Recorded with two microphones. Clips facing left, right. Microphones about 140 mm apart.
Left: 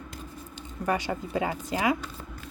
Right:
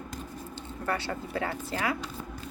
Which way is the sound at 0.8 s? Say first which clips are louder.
Left 4 dB; 15° left (ahead or behind).